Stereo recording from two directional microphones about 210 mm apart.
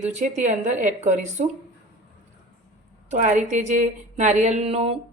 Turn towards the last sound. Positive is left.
turn(degrees=-30)  # may be behind; listen again after turning